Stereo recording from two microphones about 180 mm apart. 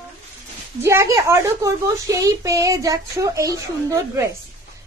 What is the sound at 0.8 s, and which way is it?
A child's voice, 15° right (ahead or behind).